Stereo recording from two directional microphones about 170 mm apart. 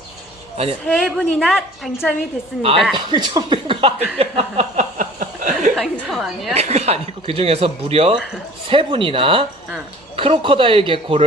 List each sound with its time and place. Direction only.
0.5 s speech: 35° right (ahead or behind)
0.9 s a woman's voice: centre (ahead or behind)
2.6 s speech: 35° right (ahead or behind)
4.2 s a sound: 35° right (ahead or behind)
5.7 s a woman's voice: centre (ahead or behind)
6.5 s speech: 40° right (ahead or behind)